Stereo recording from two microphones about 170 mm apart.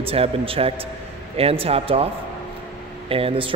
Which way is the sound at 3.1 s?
35° right (ahead or behind).